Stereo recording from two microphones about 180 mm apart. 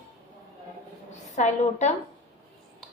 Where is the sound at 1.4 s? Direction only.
40° left (ahead or behind).